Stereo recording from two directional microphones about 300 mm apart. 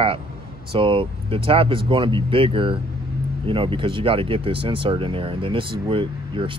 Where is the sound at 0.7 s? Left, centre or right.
Centre.